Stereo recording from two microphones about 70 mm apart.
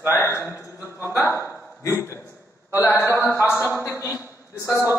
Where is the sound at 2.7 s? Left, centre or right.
Left.